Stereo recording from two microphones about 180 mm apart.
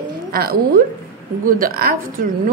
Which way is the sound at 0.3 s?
60° right (ahead or behind).